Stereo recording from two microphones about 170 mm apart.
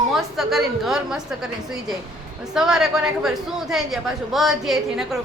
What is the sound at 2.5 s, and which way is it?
A woman's voice, 5° right (ahead or behind).